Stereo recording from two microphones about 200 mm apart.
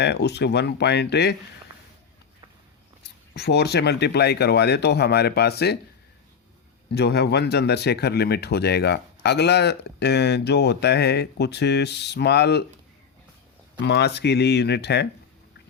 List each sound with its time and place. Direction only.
0.0 s speech: 55° left (ahead or behind)
3.0 s speech: 55° left (ahead or behind)
6.9 s speech: 55° left (ahead or behind)
13.8 s speech: 60° left (ahead or behind)